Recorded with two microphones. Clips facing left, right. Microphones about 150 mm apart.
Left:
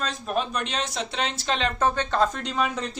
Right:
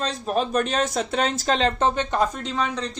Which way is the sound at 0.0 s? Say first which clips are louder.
Right 3 dB; 35° right (ahead or behind).